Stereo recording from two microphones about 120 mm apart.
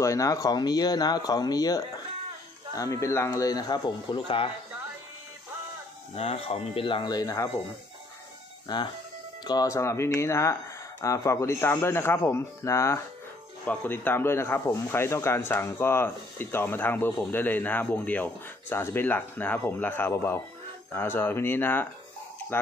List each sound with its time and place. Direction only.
0.0 s speech: 25° left (ahead or behind); by 4.5 s 45° left (ahead or behind)
6.1 s speech: 55° left (ahead or behind); by 7.5 s 30° left (ahead or behind)
8.7 s speech: 35° left (ahead or behind); by 21.8 s 15° left (ahead or behind)